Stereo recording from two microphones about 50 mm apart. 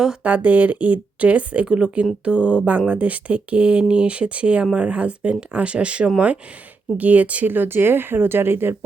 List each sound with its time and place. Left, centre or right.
0.2 s speech: right
7.4 s speech: right